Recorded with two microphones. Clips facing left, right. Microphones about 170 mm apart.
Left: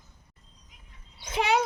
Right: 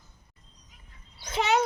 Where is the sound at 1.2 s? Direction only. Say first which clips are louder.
Even; 10° left (ahead or behind).